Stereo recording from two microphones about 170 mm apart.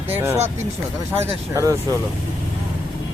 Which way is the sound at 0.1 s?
15° right (ahead or behind).